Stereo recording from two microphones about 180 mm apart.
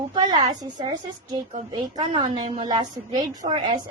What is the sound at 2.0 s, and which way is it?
A woman's voice, 25° right (ahead or behind).